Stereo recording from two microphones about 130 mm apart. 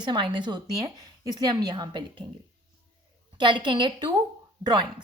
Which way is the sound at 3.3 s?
40° right (ahead or behind).